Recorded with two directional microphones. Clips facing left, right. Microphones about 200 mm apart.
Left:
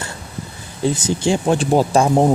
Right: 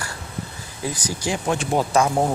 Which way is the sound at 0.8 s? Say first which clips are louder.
Left 9 dB; 25° left (ahead or behind).